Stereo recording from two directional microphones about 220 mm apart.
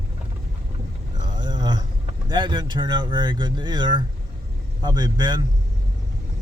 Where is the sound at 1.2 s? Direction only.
20° right (ahead or behind).